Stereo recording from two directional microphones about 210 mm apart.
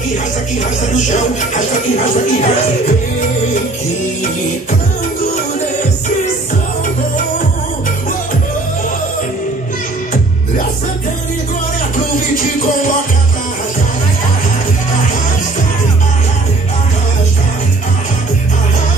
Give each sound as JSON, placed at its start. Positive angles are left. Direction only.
{"t": 0.9, "sound": "speech", "side_deg": 35}